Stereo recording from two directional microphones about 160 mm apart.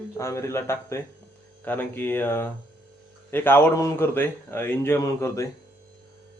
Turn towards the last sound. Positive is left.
turn(degrees=20)  # may be behind; listen again after turning